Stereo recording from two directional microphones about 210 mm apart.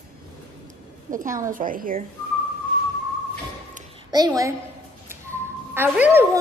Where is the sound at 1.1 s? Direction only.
40° right (ahead or behind).